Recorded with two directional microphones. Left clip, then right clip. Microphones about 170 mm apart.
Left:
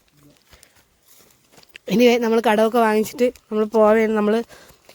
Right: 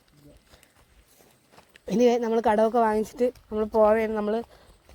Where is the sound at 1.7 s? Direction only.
25° left (ahead or behind).